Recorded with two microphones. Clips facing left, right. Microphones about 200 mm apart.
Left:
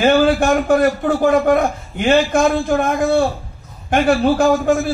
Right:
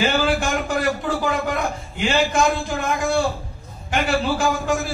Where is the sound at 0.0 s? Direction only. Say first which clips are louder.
Left 7 dB; 55° left (ahead or behind).